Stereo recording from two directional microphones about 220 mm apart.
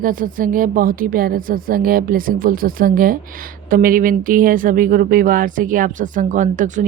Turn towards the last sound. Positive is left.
turn(degrees=-35)  # may be behind; listen again after turning